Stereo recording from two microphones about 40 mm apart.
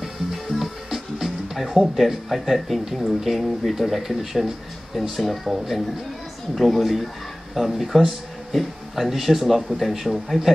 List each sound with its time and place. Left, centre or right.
0.0 s speech: centre